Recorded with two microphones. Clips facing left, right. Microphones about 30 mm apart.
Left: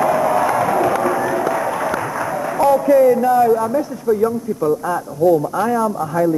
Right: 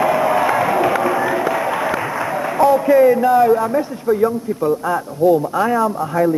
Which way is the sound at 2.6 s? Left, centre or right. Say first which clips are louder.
Even; right.